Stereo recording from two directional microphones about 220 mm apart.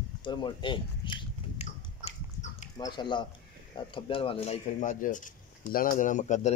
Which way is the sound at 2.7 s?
20° left (ahead or behind).